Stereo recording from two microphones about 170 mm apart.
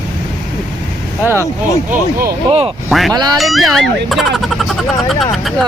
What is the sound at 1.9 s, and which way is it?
Speech, 60° right (ahead or behind).